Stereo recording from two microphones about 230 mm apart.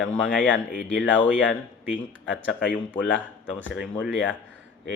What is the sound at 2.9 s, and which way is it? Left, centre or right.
Speech, centre.